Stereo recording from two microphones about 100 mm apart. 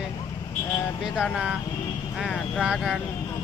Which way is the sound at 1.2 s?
10° right (ahead or behind).